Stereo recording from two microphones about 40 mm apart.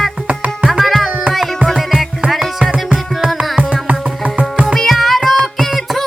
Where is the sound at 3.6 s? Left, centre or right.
Right.